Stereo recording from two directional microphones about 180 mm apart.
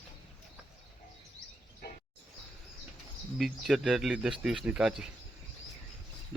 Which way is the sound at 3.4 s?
Centre (ahead or behind).